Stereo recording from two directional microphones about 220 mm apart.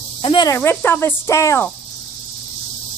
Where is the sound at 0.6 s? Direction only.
10° left (ahead or behind).